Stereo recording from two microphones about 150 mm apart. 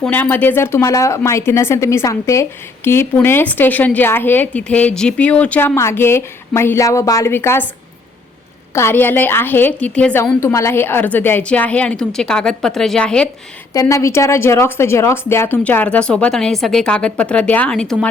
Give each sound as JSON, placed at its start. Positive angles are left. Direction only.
{"t": 0.0, "sound": "speech", "side_deg": 10}
{"t": 8.7, "sound": "speech", "side_deg": 15}
{"t": 13.7, "sound": "speech", "side_deg": 20}